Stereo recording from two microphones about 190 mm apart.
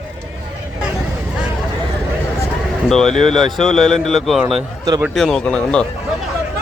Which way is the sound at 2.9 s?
Centre (ahead or behind).